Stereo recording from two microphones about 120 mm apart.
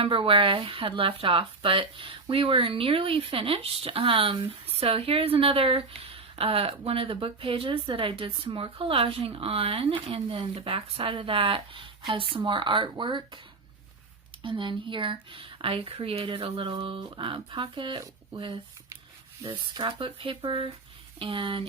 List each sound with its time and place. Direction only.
0.0 s speech: 45° right (ahead or behind)
14.4 s speech: 45° right (ahead or behind)